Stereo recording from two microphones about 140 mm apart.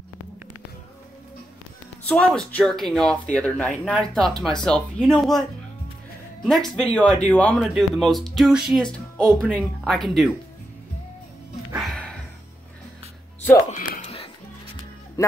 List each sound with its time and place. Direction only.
2.0 s speech: 10° left (ahead or behind)
11.8 s music: centre (ahead or behind)
13.7 s a sound: 55° left (ahead or behind)
15.2 s music: 20° left (ahead or behind)